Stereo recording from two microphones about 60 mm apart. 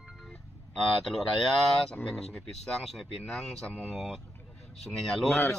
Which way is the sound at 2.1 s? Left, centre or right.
Centre.